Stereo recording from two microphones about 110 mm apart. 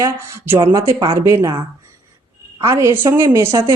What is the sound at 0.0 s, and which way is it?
Speech, 25° right (ahead or behind).